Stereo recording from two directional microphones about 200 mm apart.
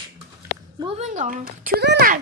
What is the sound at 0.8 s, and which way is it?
A woman's voice, 30° right (ahead or behind).